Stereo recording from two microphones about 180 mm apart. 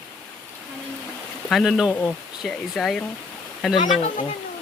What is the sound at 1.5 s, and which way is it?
Speech, centre (ahead or behind).